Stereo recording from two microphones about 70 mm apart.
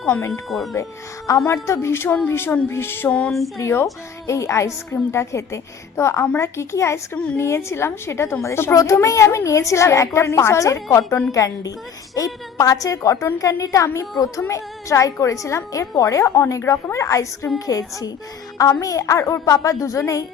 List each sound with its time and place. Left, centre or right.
0.3 s speech: centre
1.3 s a child's voice: left
3.1 s female singing: centre
3.6 s a woman's voice: left
8.7 s a child's voice: left